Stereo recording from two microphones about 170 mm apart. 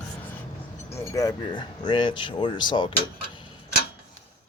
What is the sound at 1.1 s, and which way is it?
Speech, 25° left (ahead or behind).